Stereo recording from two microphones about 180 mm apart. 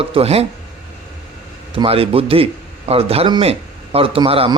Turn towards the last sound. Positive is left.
turn(degrees=-30)  # may be behind; listen again after turning